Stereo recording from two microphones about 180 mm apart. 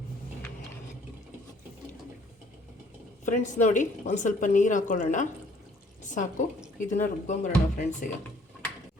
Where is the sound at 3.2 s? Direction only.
45° left (ahead or behind).